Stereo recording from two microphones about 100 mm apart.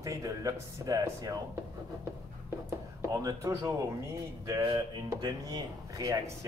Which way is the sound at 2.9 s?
30° right (ahead or behind).